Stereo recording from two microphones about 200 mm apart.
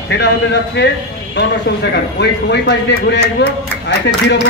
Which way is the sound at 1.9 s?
55° left (ahead or behind).